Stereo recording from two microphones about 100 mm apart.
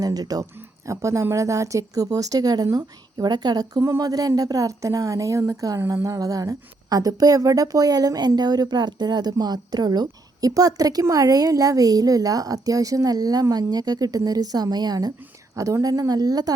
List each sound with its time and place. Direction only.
0.0 s a woman's voice: 40° right (ahead or behind)
3.8 s a woman's voice: 30° right (ahead or behind)